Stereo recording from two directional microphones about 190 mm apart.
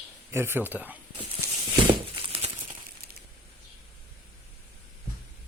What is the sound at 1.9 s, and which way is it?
Crumpling, 30° right (ahead or behind).